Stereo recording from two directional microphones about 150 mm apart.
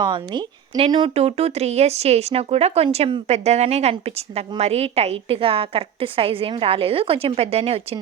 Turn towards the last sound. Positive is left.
turn(degrees=-40)  # may be behind; listen again after turning